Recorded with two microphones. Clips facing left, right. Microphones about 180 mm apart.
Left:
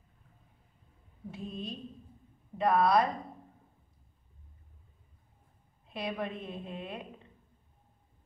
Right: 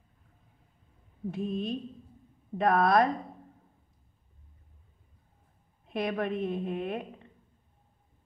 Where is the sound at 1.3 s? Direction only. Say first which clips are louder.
Right 8 dB; 55° right (ahead or behind).